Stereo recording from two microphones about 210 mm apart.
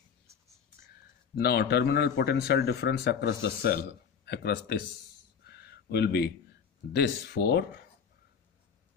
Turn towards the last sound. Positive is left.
turn(degrees=50)  # may be behind; listen again after turning